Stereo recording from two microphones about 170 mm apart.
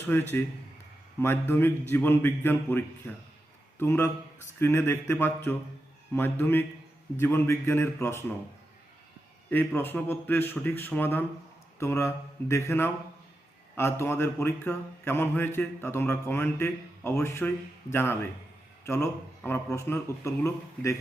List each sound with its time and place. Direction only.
0.1 s speech: 10° left (ahead or behind)
9.5 s speech: 10° left (ahead or behind)